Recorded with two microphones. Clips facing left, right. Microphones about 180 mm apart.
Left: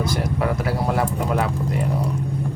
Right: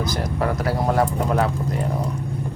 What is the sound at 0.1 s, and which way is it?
Speech, 5° left (ahead or behind).